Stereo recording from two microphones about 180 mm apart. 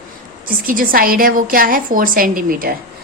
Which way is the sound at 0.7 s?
50° right (ahead or behind).